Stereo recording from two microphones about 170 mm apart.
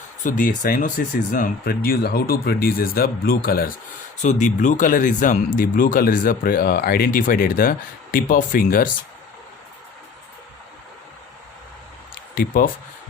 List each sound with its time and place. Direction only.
0.3 s speech: 50° left (ahead or behind)
4.2 s speech: 45° left (ahead or behind)
12.3 s speech: 60° left (ahead or behind)